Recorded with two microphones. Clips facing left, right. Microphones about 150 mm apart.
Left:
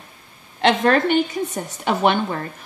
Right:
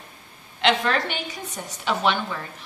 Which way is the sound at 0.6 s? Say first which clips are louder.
Left 5 dB; 45° left (ahead or behind).